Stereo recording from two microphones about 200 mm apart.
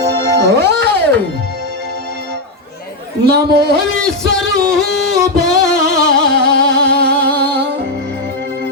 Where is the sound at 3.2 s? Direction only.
55° right (ahead or behind).